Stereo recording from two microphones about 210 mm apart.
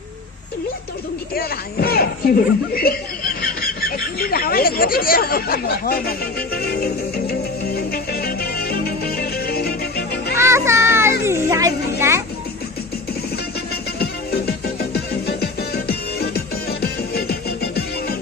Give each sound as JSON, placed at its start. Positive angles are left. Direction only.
{"t": 1.4, "sound": "speech", "side_deg": 45}
{"t": 7.3, "sound": "music", "side_deg": 50}
{"t": 10.3, "sound": "children playing", "side_deg": -15}
{"t": 14.0, "sound": "music", "side_deg": 50}